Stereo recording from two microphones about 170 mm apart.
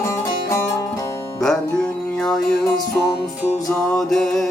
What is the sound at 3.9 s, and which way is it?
Music, centre (ahead or behind).